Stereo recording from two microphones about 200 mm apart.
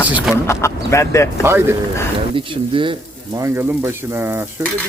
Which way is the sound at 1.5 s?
10° right (ahead or behind).